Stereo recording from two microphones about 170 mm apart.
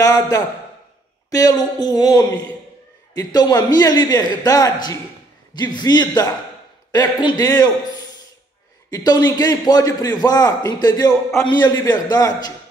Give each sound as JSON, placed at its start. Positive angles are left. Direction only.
{"t": 0.0, "sound": "a man's voice", "side_deg": 20}